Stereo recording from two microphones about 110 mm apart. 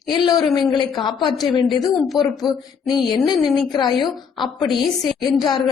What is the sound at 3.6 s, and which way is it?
Speech, 40° left (ahead or behind).